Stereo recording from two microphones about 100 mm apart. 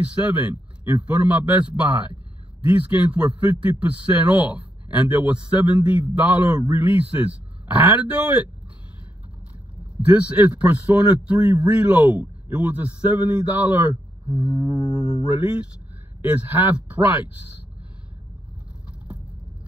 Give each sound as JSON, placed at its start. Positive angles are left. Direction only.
{"t": 0.0, "sound": "a man's voice", "side_deg": -15}
{"t": 9.9, "sound": "a man's voice", "side_deg": -15}